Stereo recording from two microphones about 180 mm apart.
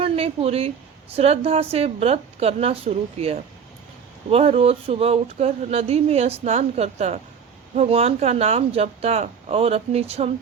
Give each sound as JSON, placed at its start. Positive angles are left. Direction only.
{"t": 0.0, "sound": "speech", "side_deg": -35}